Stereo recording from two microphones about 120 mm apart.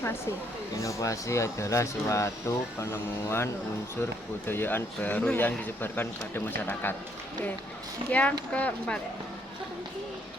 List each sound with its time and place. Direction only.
0.8 s speech: 25° left (ahead or behind)
8.1 s speech: 10° left (ahead or behind)